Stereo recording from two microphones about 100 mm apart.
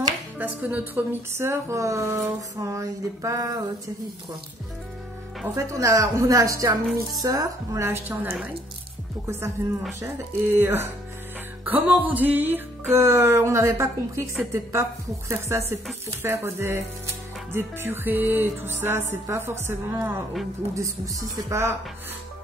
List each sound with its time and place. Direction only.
0.4 s speech: 15° right (ahead or behind); by 3.6 s 35° right (ahead or behind)
5.6 s speech: 30° right (ahead or behind)
9.9 s speech: 25° right (ahead or behind)